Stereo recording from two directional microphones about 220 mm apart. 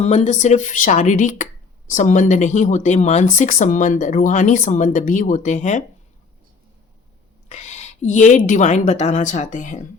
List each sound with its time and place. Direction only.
0.0 s speech: 30° left (ahead or behind)
7.4 s speech: 30° left (ahead or behind)